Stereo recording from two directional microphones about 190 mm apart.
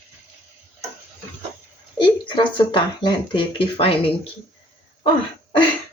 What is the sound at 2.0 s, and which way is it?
Speech, 25° left (ahead or behind).